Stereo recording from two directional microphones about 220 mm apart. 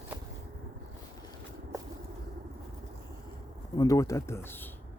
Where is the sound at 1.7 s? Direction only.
15° right (ahead or behind).